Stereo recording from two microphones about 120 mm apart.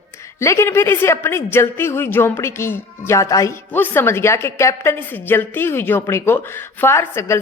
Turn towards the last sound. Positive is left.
turn(degrees=20)  # may be behind; listen again after turning